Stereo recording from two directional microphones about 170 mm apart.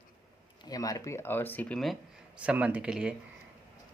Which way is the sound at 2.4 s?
10° right (ahead or behind).